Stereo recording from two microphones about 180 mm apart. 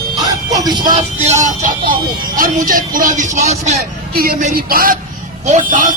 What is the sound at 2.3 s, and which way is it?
Speech, 50° right (ahead or behind).